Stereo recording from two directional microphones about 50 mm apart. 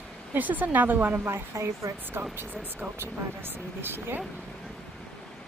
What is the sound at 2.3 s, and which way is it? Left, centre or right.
Speech, right.